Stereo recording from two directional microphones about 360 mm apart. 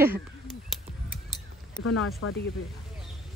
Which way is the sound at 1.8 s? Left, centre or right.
Left.